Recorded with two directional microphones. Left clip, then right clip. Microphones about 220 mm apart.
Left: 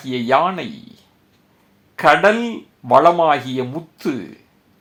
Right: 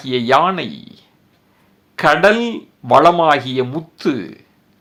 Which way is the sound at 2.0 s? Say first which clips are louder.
Right 1 dB; 20° right (ahead or behind).